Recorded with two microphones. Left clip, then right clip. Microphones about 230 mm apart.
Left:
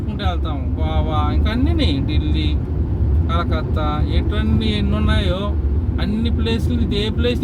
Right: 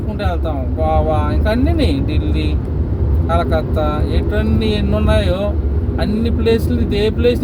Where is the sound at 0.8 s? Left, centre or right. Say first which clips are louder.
Right 7 dB; centre.